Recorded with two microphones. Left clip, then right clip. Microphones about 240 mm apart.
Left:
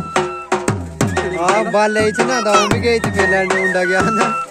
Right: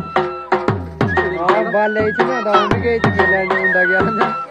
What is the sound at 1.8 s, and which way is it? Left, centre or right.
Music, left.